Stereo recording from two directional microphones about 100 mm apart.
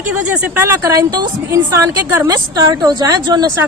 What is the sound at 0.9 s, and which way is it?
A woman's voice, 40° right (ahead or behind).